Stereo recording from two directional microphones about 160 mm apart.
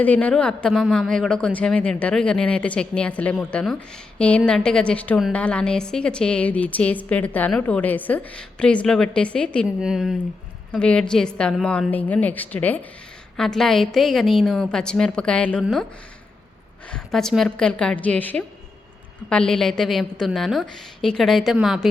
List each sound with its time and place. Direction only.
0.0 s a woman's voice: 10° left (ahead or behind)
16.9 s a woman's voice: 5° left (ahead or behind)